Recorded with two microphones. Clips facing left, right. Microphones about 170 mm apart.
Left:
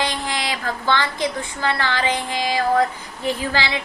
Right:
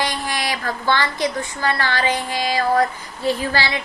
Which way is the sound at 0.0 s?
20° left (ahead or behind).